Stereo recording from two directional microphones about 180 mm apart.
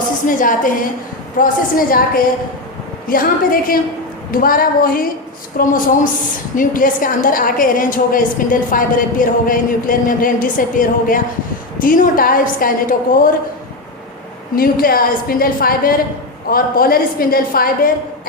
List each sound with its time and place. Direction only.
0.3 s a woman's voice: 50° left (ahead or behind)
14.5 s a woman's voice: 55° left (ahead or behind)